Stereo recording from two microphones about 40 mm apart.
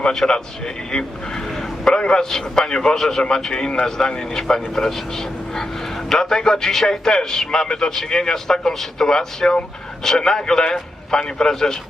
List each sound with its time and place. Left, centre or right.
0.0 s a man's voice: centre
4.7 s a man's voice: centre